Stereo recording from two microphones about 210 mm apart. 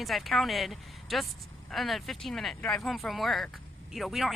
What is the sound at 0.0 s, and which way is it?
Speech, centre (ahead or behind).